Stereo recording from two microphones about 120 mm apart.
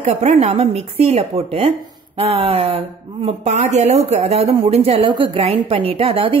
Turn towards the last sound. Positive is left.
turn(degrees=-50)  # may be behind; listen again after turning